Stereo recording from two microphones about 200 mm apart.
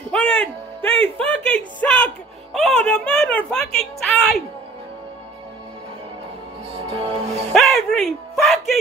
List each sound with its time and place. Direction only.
0.1 s music: 5° left (ahead or behind)
1.8 s speech: 5° left (ahead or behind)
6.7 s music: 25° right (ahead or behind)
7.5 s speech: centre (ahead or behind)